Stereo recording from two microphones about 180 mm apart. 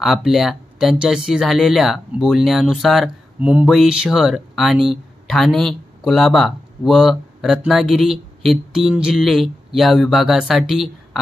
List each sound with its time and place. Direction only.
0.0 s speech: centre (ahead or behind)